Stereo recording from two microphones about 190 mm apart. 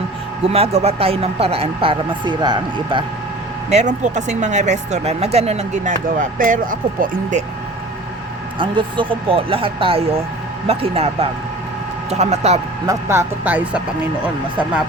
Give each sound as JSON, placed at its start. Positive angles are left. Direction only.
{"t": 0.4, "sound": "speech", "side_deg": -30}
{"t": 3.7, "sound": "speech", "side_deg": -35}
{"t": 8.5, "sound": "speech", "side_deg": -25}
{"t": 12.8, "sound": "speech", "side_deg": -15}